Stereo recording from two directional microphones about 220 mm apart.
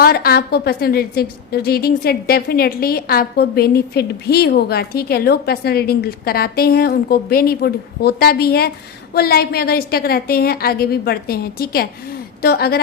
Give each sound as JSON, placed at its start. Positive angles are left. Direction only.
{"t": 0.0, "sound": "a woman's voice", "side_deg": 45}